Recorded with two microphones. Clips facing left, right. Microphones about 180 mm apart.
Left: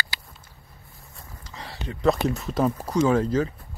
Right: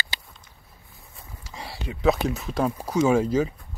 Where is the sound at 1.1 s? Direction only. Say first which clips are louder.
Right 1 dB; 10° right (ahead or behind).